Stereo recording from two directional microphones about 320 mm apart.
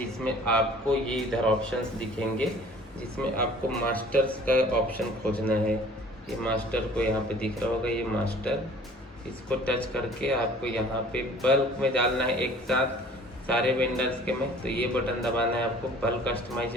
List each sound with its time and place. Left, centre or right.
0.4 s a man's voice: centre
3.7 s a man's voice: centre